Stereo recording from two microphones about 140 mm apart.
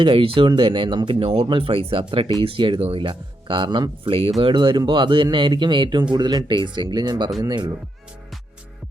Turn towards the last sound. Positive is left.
turn(degrees=-30)  # may be behind; listen again after turning